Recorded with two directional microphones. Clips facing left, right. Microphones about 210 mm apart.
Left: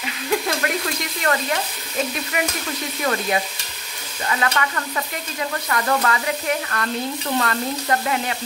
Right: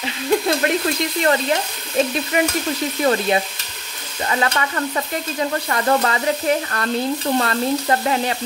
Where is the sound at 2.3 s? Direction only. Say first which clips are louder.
Right 7 dB; 30° right (ahead or behind).